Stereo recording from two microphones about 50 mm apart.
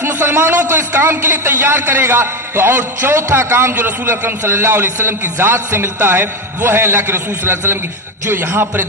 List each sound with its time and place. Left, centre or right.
0.0 s a man's voice: right